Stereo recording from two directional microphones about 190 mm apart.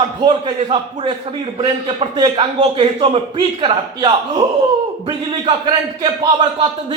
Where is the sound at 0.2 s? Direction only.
30° right (ahead or behind).